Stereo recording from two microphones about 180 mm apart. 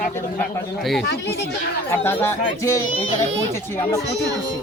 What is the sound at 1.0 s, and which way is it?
Speech, 70° left (ahead or behind).